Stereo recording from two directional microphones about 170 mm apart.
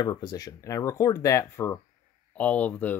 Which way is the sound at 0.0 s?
25° left (ahead or behind).